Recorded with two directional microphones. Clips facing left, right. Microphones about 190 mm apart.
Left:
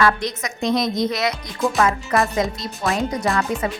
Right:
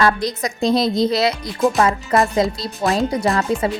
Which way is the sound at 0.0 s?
35° right (ahead or behind).